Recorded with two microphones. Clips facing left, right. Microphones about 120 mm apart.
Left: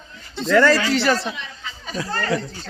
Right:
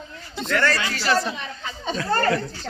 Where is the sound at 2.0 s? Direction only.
50° right (ahead or behind).